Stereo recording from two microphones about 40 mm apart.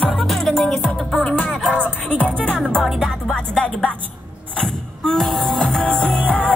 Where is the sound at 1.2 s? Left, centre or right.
Left.